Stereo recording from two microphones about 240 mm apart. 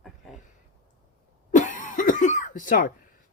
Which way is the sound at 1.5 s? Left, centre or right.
Left.